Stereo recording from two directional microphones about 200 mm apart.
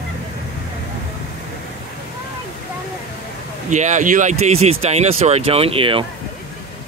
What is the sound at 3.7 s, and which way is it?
Speech, 35° right (ahead or behind).